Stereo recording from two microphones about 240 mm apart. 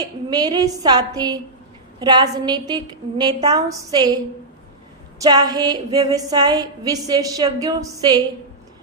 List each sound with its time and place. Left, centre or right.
0.0 s a woman's voice: centre
5.2 s a woman's voice: centre